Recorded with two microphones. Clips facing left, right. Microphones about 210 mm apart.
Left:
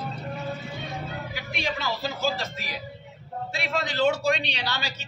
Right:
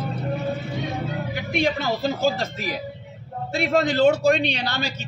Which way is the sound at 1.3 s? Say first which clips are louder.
Right 10 dB; 50° right (ahead or behind).